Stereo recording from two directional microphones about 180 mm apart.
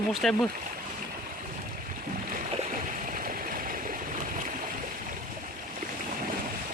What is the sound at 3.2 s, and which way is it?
Stream, 50° right (ahead or behind).